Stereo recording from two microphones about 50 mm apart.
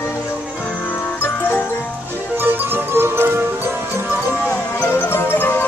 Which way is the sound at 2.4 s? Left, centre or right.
Right.